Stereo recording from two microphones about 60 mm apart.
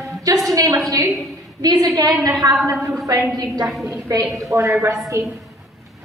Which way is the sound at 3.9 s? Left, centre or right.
Right.